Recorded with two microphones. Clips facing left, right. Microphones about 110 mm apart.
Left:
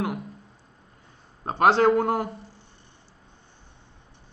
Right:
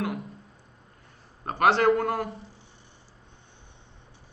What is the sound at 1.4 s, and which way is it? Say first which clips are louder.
Speech: left 2 dB; 25° left (ahead or behind).